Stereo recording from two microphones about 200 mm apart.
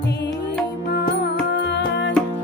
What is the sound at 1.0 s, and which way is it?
Music, 55° left (ahead or behind).